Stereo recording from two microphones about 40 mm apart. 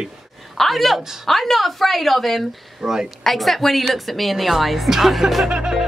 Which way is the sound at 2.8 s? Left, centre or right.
Centre.